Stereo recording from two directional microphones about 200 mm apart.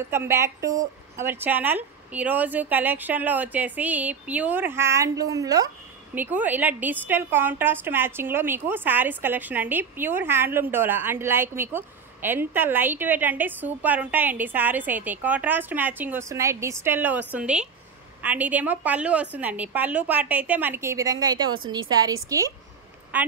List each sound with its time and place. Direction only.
0.1 s a woman's voice: 10° right (ahead or behind)